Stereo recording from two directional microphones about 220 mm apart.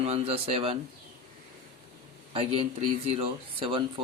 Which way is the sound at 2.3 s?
25° right (ahead or behind).